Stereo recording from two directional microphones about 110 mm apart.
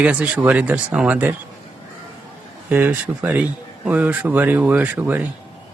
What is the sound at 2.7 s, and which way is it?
Speech, 15° right (ahead or behind).